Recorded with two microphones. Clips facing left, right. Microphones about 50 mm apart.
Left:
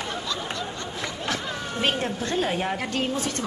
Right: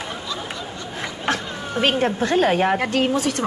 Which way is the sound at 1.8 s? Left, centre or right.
Right.